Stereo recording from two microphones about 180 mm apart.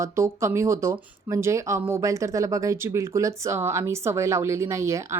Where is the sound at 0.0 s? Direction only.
15° right (ahead or behind).